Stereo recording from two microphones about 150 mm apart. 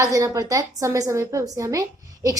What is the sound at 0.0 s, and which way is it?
A woman's voice, 20° right (ahead or behind).